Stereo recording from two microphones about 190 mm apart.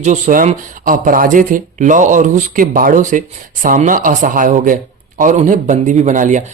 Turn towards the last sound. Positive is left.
turn(degrees=-40)  # may be behind; listen again after turning